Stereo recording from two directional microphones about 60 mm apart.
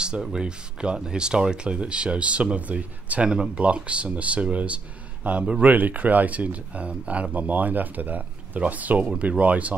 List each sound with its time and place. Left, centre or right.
0.0 s speech: centre